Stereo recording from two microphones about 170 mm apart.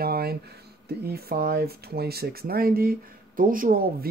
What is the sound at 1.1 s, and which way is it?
Speech, 65° right (ahead or behind).